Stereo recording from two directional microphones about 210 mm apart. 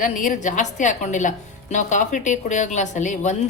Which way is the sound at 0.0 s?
40° left (ahead or behind).